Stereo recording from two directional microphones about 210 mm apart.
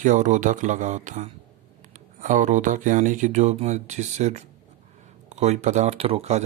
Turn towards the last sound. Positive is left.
turn(degrees=-30)  # may be behind; listen again after turning